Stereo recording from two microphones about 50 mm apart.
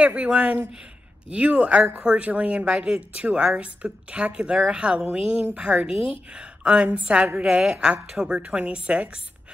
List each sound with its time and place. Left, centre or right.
0.0 s a woman's voice: right
7.4 s a woman's voice: centre